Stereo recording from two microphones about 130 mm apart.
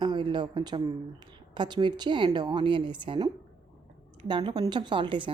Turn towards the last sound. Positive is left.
turn(degrees=-40)  # may be behind; listen again after turning